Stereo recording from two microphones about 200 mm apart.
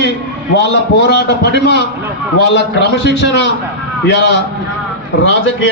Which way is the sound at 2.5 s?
60° left (ahead or behind).